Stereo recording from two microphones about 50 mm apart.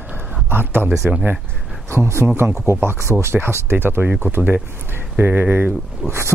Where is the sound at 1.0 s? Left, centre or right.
Right.